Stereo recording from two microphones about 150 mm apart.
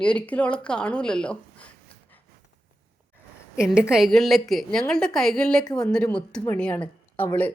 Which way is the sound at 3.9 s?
Centre (ahead or behind).